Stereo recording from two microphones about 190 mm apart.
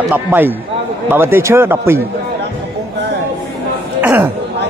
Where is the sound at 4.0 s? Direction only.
10° right (ahead or behind).